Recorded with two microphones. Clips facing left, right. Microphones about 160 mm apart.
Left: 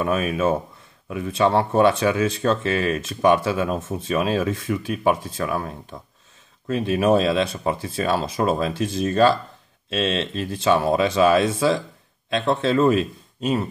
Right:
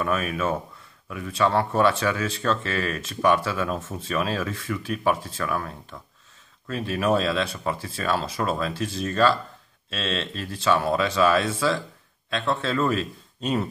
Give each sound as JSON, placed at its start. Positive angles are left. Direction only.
{"t": 0.0, "sound": "speech", "side_deg": 20}
{"t": 13.4, "sound": "speech", "side_deg": 5}